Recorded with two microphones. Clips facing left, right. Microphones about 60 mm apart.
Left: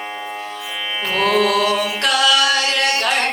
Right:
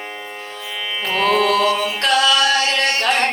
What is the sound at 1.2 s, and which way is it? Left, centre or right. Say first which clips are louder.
Music: right 1 dB; right.